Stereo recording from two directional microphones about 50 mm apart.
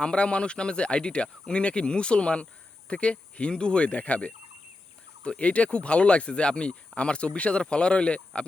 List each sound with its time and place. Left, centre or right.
0.0 s speech: left